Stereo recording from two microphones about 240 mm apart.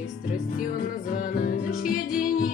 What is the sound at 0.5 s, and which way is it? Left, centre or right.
Music, left.